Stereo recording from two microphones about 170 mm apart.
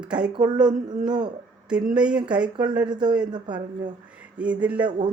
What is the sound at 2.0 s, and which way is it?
Speech, 5° right (ahead or behind).